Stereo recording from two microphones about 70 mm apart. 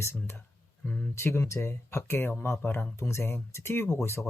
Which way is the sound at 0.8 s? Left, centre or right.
Left.